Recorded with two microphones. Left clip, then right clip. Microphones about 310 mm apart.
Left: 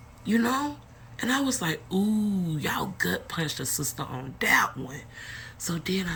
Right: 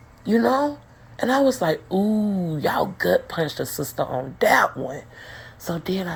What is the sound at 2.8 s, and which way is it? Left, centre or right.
Speech, centre.